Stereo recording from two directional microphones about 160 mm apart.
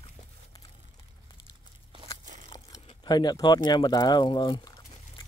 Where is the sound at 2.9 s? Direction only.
30° left (ahead or behind).